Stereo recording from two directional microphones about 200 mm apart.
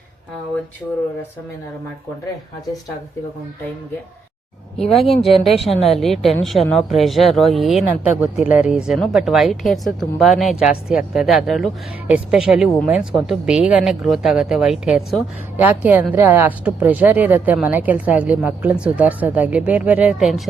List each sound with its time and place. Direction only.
4.8 s a woman's voice: centre (ahead or behind)
5.3 s speech: 30° left (ahead or behind)
5.5 s a woman's voice: centre (ahead or behind)